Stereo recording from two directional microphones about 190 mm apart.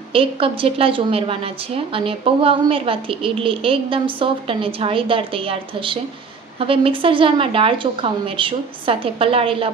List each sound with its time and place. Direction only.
0.1 s a woman's voice: 30° right (ahead or behind)